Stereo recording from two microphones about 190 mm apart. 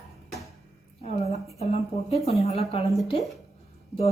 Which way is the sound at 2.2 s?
35° left (ahead or behind).